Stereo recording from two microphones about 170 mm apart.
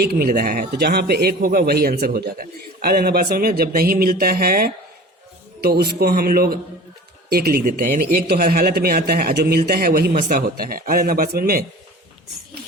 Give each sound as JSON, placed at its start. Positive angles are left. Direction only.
{"t": 0.0, "sound": "a man's voice", "side_deg": -65}